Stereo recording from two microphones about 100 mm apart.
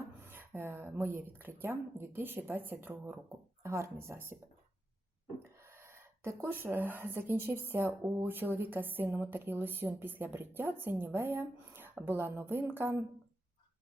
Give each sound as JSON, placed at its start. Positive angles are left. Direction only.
{"t": 0.2, "sound": "a woman's voice", "side_deg": -20}
{"t": 5.4, "sound": "a woman's voice", "side_deg": -25}